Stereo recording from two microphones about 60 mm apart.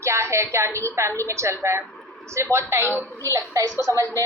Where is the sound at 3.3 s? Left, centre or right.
Right.